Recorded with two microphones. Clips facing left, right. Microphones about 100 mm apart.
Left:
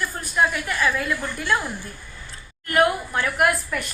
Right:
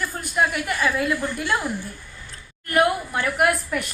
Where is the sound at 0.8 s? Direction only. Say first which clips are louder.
Right 1 dB; 15° right (ahead or behind).